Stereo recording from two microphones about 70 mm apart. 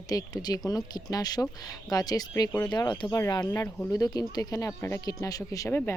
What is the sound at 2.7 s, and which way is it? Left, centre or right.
Speech, left.